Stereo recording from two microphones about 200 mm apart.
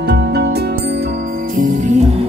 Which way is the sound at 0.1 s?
55° right (ahead or behind).